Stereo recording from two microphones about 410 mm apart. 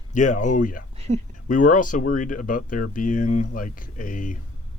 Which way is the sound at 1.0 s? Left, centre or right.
Centre.